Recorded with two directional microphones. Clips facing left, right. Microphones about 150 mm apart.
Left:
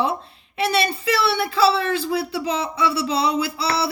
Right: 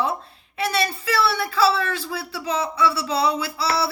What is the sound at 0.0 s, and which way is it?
A woman's voice, 25° left (ahead or behind).